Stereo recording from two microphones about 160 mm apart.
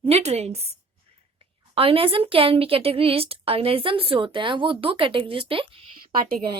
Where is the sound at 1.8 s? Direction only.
35° right (ahead or behind).